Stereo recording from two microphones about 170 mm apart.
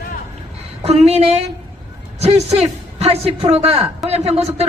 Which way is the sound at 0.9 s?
40° right (ahead or behind).